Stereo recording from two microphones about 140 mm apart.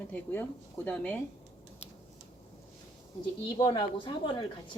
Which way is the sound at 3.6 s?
35° left (ahead or behind).